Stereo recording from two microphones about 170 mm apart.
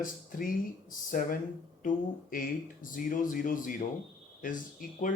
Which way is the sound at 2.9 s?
50° left (ahead or behind).